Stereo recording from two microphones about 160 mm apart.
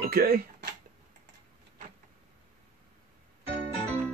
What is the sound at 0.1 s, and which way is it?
Speech, 70° right (ahead or behind).